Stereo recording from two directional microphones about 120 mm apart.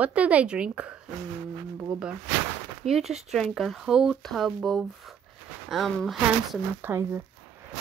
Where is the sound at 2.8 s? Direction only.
Centre (ahead or behind).